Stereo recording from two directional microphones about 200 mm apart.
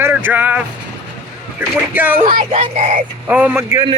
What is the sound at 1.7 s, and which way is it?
Speech, 10° right (ahead or behind).